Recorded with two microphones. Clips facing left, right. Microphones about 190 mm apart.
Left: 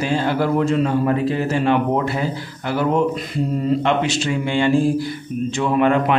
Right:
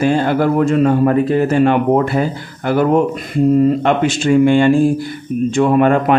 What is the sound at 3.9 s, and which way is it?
Speech, 50° right (ahead or behind).